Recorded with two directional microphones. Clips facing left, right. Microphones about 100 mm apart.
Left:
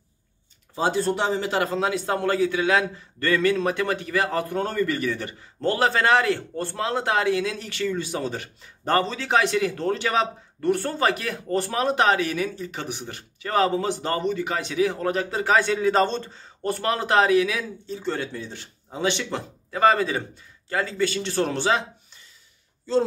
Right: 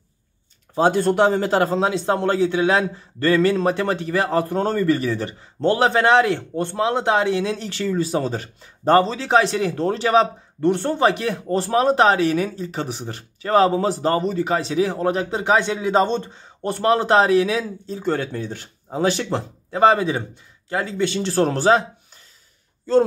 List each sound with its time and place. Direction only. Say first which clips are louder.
0.7 s speech: right 6 dB; 55° right (ahead or behind)
1.5 s a man's voice: right 5 dB; 35° right (ahead or behind)
21.3 s speech: right 9 dB; 40° right (ahead or behind)